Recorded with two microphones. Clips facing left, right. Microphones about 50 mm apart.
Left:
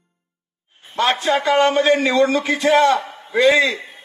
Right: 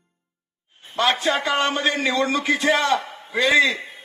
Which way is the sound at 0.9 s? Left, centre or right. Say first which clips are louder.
Left 3 dB; left.